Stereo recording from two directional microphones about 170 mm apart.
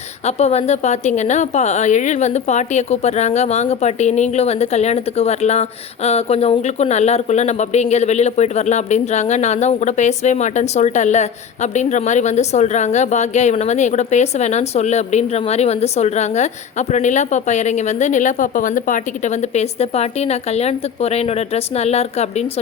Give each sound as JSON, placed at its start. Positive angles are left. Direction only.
{"t": 0.3, "sound": "a woman's voice", "side_deg": 40}